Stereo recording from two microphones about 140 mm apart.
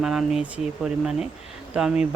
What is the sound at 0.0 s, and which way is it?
Speech, 5° right (ahead or behind).